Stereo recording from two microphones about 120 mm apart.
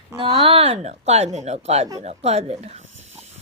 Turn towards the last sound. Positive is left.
turn(degrees=-60)  # may be behind; listen again after turning